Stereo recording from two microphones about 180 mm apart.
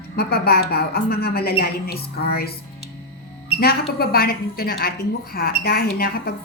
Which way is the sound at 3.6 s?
60° left (ahead or behind).